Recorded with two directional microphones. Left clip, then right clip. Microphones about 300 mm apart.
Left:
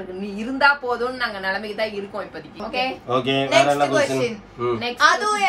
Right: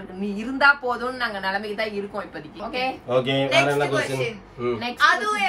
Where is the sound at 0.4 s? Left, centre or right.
Centre.